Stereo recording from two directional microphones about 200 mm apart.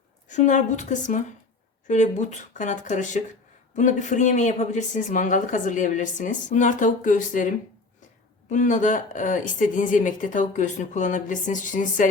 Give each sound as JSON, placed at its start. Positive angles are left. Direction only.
{"t": 0.3, "sound": "speech", "side_deg": 35}